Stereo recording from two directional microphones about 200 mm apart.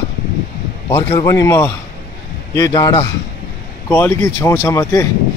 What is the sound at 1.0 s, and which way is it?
Speech, 20° left (ahead or behind).